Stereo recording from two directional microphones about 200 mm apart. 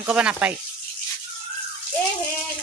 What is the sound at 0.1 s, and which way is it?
Speech, 5° right (ahead or behind).